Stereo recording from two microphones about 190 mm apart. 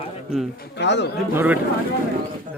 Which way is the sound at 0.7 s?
65° left (ahead or behind).